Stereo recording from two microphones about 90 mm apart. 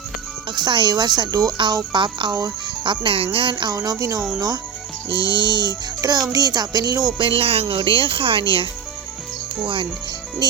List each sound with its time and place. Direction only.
0.5 s speech: 55° right (ahead or behind)
1.7 s speech: 60° right (ahead or behind)
3.5 s speech: 45° right (ahead or behind)
5.2 s speech: 65° right (ahead or behind)
6.0 s a child's voice: 45° right (ahead or behind)
7.2 s speech: 80° right